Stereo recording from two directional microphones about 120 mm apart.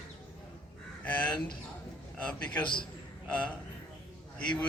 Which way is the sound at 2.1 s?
10° left (ahead or behind).